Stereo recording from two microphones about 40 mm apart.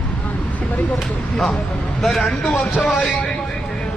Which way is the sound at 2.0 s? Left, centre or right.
Centre.